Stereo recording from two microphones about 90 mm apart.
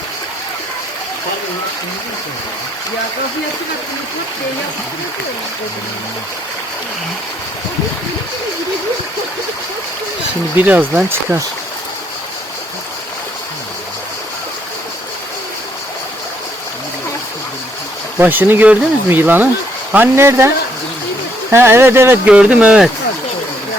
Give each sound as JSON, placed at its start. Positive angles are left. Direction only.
{"t": 10.6, "sound": "speech", "side_deg": -20}
{"t": 18.2, "sound": "speech", "side_deg": -20}
{"t": 21.5, "sound": "speech", "side_deg": -30}
{"t": 22.3, "sound": "speech", "side_deg": -15}